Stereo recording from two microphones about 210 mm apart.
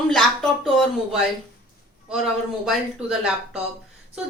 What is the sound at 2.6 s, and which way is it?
Speech, centre (ahead or behind).